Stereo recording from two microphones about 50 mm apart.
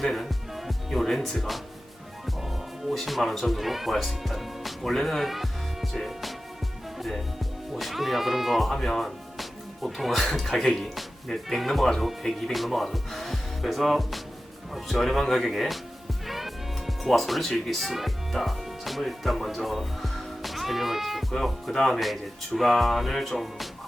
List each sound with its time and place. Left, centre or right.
0.0 s speech: centre
7.8 s speech: centre
16.2 s music: centre
21.3 s speech: centre